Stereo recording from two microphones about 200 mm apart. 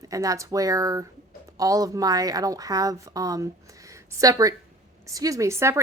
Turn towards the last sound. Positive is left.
turn(degrees=-15)  # may be behind; listen again after turning